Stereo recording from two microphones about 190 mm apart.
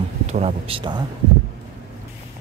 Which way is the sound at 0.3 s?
35° right (ahead or behind).